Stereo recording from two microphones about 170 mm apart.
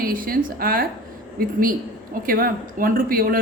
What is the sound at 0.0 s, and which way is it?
A woman's voice, 55° right (ahead or behind).